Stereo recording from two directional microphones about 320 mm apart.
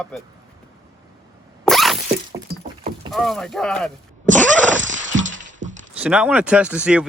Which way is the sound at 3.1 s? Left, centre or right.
Centre.